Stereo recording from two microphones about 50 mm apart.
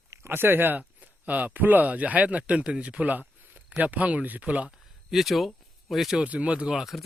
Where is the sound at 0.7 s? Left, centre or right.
Right.